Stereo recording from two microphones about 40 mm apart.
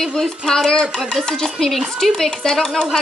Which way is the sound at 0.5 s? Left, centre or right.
Centre.